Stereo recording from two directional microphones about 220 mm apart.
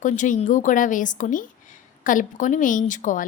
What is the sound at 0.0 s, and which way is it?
A woman's voice, 35° left (ahead or behind).